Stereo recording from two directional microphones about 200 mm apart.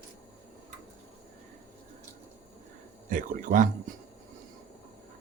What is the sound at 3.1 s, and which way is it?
Speech, 40° right (ahead or behind).